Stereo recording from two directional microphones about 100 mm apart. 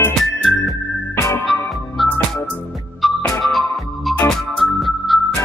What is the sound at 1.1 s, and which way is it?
Music, 30° left (ahead or behind).